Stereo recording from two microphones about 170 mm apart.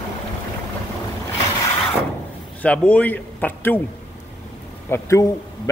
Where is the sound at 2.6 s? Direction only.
10° left (ahead or behind).